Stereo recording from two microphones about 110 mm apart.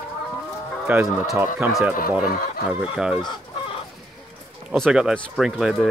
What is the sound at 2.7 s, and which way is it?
Speech, 10° right (ahead or behind).